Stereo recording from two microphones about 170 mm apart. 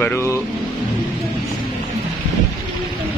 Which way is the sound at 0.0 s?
15° left (ahead or behind).